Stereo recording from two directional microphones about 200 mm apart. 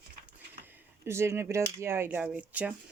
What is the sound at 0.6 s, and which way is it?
Speech, 10° right (ahead or behind).